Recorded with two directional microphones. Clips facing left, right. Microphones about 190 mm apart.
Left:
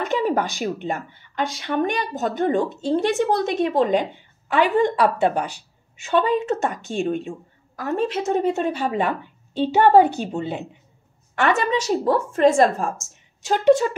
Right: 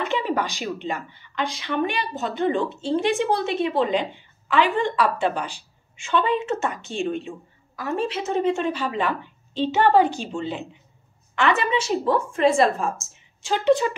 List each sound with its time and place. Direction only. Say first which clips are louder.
0.2 s a sound: left 4 dB; 45° left (ahead or behind)
0.6 s speech: left 3 dB; 50° left (ahead or behind)
5.0 s speech: left 4 dB; 15° left (ahead or behind)
6.0 s speech: left 3 dB; 45° left (ahead or behind)
11.3 s speech: left 1 dB; 45° left (ahead or behind)